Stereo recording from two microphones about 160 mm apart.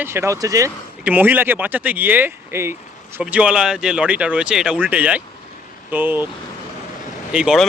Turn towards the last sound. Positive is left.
turn(degrees=-5)  # may be behind; listen again after turning